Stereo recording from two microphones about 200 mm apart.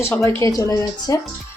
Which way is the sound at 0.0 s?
15° left (ahead or behind).